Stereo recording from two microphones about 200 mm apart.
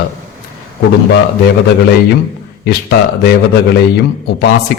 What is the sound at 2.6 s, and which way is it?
A man's voice, 55° left (ahead or behind).